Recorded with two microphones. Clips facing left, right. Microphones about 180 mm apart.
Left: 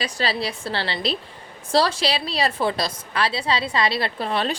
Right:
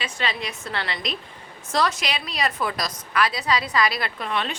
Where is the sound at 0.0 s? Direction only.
35° left (ahead or behind).